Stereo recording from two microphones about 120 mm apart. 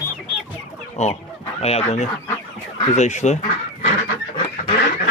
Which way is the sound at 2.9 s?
80° left.